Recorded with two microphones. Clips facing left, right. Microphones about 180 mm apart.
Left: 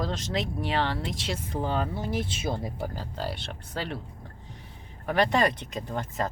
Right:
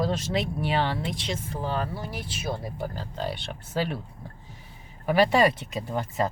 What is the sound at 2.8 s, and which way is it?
Speech, 5° left (ahead or behind).